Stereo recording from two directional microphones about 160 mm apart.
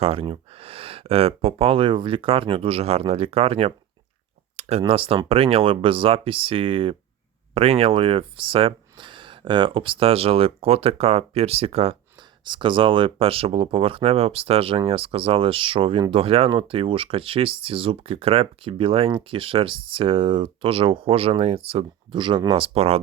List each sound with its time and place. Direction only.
0.0 s speech: 35° right (ahead or behind)
4.5 s a sound: 45° right (ahead or behind)
4.8 s speech: 35° right (ahead or behind)